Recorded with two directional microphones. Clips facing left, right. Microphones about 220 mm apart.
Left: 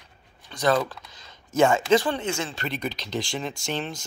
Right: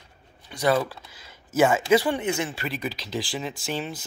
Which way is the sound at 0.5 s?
10° right (ahead or behind).